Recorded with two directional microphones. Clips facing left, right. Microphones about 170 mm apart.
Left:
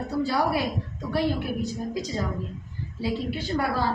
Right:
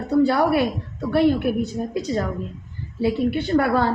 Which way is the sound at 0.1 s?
60° right (ahead or behind).